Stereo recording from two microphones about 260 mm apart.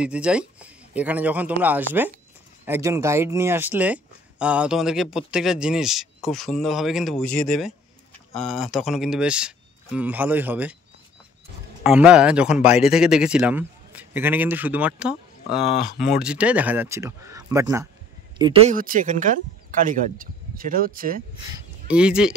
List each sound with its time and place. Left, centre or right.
0.0 s speech: centre
11.8 s speech: centre
18.4 s speech: right
21.5 s speech: centre